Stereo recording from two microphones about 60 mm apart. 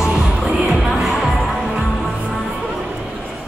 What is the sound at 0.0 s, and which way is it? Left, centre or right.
Music, centre.